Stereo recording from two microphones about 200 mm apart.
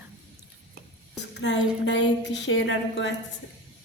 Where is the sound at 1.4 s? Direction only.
65° left (ahead or behind).